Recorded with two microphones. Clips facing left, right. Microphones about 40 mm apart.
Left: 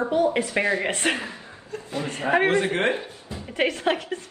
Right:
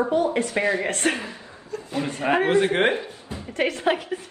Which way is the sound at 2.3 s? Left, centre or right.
Left.